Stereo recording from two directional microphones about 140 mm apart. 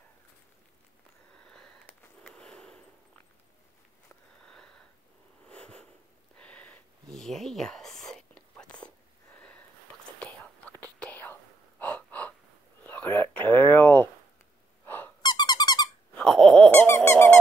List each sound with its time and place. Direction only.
2.2 s a sound: 5° left (ahead or behind)
5.5 s a sound: 10° left (ahead or behind)
6.3 s whispering: 10° left (ahead or behind)
11.8 s gasp: 10° left (ahead or behind)
12.8 s a sound: 10° left (ahead or behind)
14.9 s squeak: 15° left (ahead or behind)
15.2 s dog: 30° left (ahead or behind)
16.2 s squeak: 5° left (ahead or behind)
16.7 s squeak: 15° left (ahead or behind)